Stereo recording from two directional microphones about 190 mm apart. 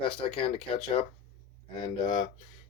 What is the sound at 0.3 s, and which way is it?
Speech, 30° left (ahead or behind).